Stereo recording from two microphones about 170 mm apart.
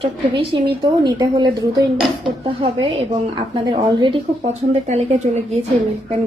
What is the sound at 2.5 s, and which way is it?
Speech, 30° right (ahead or behind).